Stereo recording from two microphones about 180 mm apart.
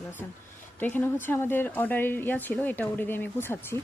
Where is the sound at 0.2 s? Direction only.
10° left (ahead or behind).